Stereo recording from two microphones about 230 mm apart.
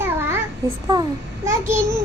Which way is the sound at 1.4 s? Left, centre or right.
Centre.